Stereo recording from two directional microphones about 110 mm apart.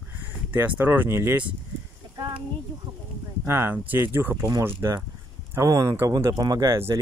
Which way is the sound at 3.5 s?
20° right (ahead or behind).